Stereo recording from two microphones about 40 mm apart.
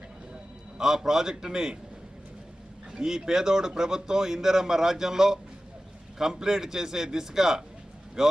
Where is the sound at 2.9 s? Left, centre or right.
Centre.